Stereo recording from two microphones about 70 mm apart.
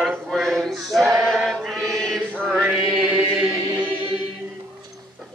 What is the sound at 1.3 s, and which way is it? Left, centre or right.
Chant, centre.